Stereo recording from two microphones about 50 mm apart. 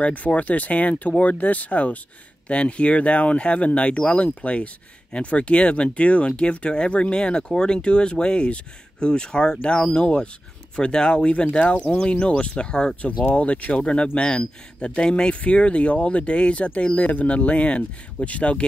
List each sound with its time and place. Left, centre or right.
0.0 s speech: left